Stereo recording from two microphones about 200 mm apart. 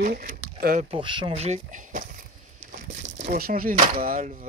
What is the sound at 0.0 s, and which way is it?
Speech, 40° right (ahead or behind).